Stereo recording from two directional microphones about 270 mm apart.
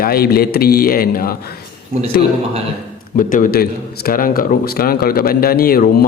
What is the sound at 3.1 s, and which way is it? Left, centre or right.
A man's voice, left.